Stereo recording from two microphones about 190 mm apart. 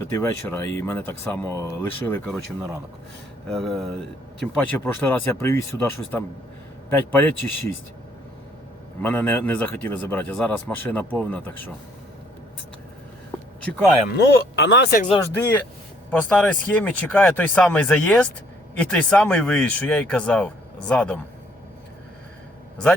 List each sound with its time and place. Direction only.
0.1 s speech: 10° left (ahead or behind)
3.5 s speech: centre (ahead or behind)
9.0 s speech: 10° left (ahead or behind)
14.2 s speech: 65° left (ahead or behind)
15.2 s speech: 10° left (ahead or behind)